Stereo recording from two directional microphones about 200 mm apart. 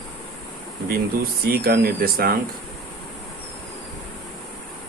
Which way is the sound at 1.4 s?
50° right (ahead or behind).